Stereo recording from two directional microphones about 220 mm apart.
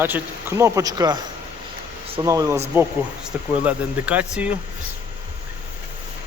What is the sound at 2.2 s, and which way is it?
Speech, 15° right (ahead or behind).